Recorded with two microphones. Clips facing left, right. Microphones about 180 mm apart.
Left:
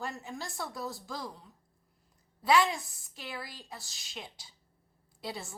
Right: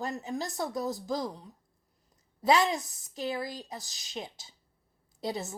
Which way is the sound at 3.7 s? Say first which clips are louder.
Right 5 dB; 15° right (ahead or behind).